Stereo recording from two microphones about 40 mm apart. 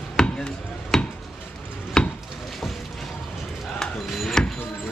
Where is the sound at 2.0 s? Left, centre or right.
Centre.